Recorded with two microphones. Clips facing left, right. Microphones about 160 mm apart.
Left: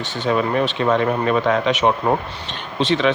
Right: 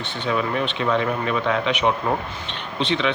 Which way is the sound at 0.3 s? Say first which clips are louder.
Left 4 dB; 45° left (ahead or behind).